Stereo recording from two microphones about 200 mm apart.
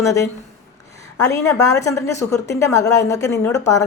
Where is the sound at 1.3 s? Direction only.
15° left (ahead or behind).